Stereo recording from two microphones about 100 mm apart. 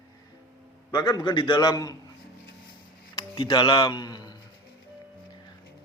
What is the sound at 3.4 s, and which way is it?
Speech, 50° left (ahead or behind).